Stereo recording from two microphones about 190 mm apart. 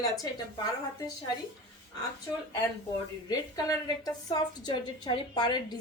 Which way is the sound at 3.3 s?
20° left (ahead or behind).